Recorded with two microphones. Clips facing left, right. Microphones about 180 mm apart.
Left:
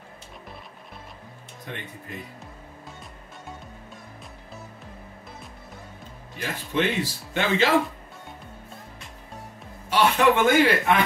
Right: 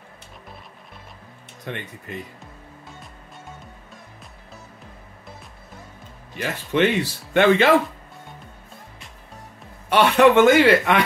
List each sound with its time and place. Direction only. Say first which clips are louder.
6.7 s speech: right 5 dB; 65° right (ahead or behind)
9.8 s speech: right 5 dB; 65° right (ahead or behind)